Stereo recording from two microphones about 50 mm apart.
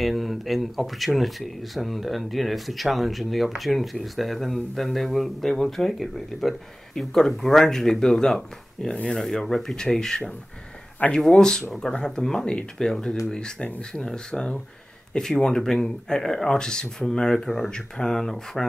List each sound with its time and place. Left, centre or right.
0.0 s speech: centre